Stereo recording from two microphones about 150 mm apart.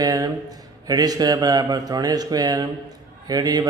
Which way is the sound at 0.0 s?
25° right (ahead or behind).